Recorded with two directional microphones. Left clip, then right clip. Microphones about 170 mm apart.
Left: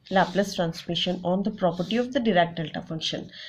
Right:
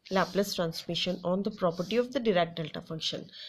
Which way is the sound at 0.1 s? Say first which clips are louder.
Left 5 dB; 45° right (ahead or behind).